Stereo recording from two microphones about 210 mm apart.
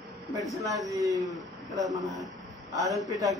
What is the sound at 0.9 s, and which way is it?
Speech, 15° right (ahead or behind).